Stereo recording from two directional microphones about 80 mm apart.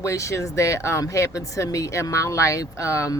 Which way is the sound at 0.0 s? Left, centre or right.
Left.